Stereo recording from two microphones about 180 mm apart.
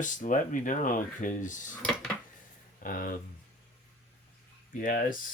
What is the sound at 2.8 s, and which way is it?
Speech, 50° left (ahead or behind).